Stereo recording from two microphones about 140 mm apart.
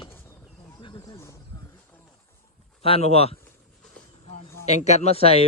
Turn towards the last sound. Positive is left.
turn(degrees=45)  # may be behind; listen again after turning